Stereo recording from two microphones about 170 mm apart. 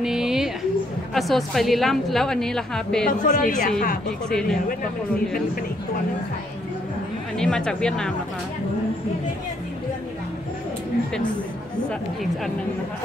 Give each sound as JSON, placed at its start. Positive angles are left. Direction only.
{"t": 0.0, "sound": "a sound", "side_deg": -5}
{"t": 1.1, "sound": "a woman's voice", "side_deg": 0}
{"t": 3.1, "sound": "a woman's voice", "side_deg": 55}
{"t": 4.3, "sound": "a woman's voice", "side_deg": 5}
{"t": 7.3, "sound": "a woman's voice", "side_deg": 5}